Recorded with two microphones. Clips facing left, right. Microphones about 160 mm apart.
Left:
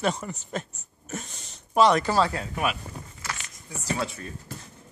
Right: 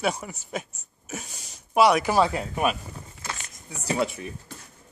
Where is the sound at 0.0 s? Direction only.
5° right (ahead or behind).